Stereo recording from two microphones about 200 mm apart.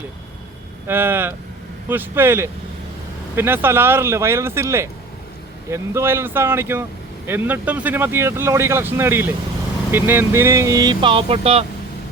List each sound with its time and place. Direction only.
0.9 s speech: 10° right (ahead or behind); by 11.6 s 30° right (ahead or behind)